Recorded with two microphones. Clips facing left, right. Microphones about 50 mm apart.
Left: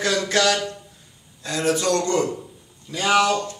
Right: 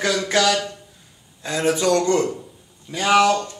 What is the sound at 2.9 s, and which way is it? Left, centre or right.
Speech, centre.